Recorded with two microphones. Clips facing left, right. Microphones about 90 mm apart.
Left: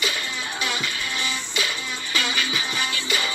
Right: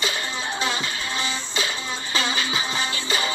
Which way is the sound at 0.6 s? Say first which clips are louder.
Even; 25° right (ahead or behind).